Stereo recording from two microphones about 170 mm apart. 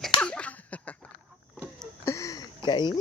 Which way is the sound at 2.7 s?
25° left (ahead or behind).